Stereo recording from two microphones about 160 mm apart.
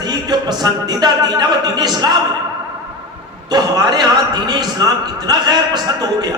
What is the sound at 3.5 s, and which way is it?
A man's voice, 25° right (ahead or behind).